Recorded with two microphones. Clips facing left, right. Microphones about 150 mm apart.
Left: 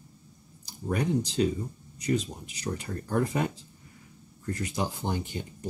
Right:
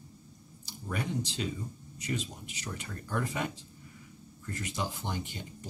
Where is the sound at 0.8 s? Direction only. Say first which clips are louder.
Left 7 dB; 40° left (ahead or behind).